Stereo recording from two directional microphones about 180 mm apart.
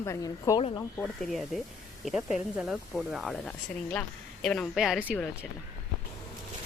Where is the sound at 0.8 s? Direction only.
5° left (ahead or behind).